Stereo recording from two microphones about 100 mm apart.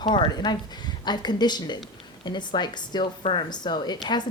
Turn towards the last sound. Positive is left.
turn(degrees=50)  # may be behind; listen again after turning